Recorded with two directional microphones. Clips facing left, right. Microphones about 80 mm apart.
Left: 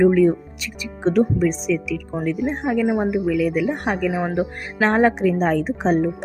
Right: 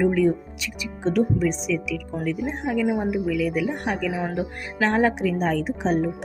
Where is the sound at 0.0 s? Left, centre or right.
Left.